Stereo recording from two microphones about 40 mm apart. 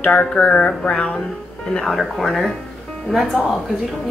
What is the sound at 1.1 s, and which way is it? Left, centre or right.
Speech, centre.